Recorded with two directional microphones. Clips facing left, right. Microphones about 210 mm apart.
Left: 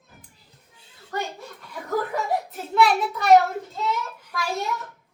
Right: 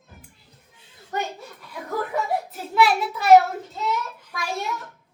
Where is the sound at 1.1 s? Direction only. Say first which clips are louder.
Right 1 dB; 20° right (ahead or behind).